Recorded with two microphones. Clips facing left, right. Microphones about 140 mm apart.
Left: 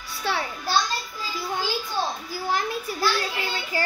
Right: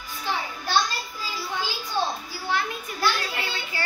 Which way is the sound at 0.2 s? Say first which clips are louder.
Left 2 dB; 70° left (ahead or behind).